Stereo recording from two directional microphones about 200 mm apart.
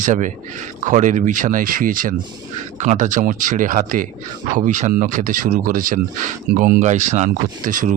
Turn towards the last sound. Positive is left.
turn(degrees=-40)  # may be behind; listen again after turning